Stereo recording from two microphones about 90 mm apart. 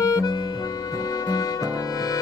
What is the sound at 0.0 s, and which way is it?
Accordion, 45° left (ahead or behind).